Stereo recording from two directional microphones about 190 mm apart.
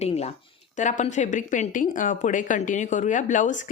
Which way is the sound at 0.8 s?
40° left (ahead or behind).